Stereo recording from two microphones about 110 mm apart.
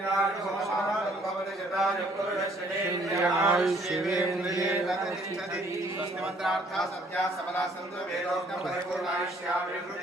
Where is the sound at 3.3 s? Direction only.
25° right (ahead or behind).